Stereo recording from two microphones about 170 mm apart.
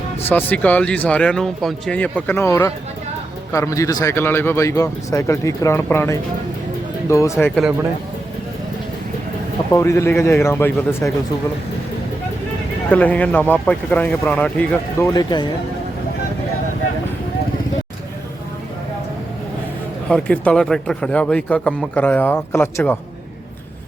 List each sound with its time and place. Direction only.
0.3 s speech: 10° left (ahead or behind)
9.7 s speech: 15° left (ahead or behind)
12.9 s speech: 10° left (ahead or behind)
15.0 s speech: 25° left (ahead or behind)
20.1 s speech: 5° left (ahead or behind)